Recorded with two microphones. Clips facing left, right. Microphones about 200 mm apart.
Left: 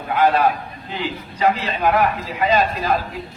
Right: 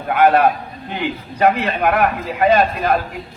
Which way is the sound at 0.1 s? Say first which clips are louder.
Right 3 dB; 60° right (ahead or behind).